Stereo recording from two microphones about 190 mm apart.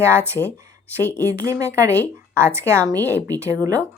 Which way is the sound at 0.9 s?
10° left (ahead or behind).